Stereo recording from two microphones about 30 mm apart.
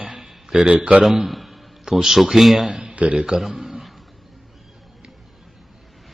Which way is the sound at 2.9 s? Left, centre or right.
Right.